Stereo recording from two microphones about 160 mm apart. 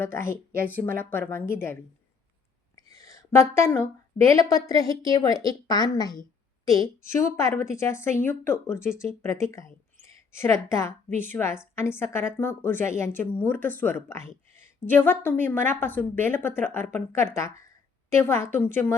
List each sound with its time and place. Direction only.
0.0 s a woman's voice: 15° left (ahead or behind)
0.5 s speech: 65° right (ahead or behind)
1.1 s a woman's voice: 15° left (ahead or behind)
2.7 s a sound: 20° left (ahead or behind)
4.3 s a woman's voice: 20° left (ahead or behind)
7.3 s a woman's voice: 15° left (ahead or behind)